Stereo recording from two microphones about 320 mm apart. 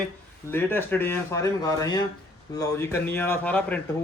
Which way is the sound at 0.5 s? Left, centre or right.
Centre.